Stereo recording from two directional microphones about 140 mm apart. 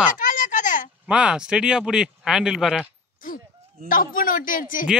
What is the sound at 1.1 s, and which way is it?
Speech, 5° right (ahead or behind).